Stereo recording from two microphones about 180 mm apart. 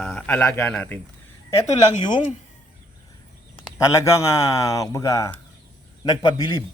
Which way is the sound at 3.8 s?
15° left (ahead or behind).